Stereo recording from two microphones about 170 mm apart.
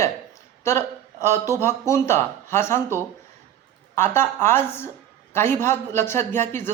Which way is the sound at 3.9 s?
15° left (ahead or behind).